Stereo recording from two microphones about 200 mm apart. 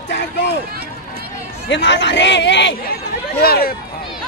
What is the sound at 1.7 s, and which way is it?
A man's voice, 60° left (ahead or behind).